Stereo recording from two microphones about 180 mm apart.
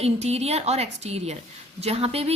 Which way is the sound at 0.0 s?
35° right (ahead or behind).